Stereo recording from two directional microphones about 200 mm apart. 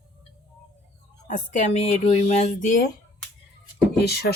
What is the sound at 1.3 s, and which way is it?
Speech, 40° left (ahead or behind).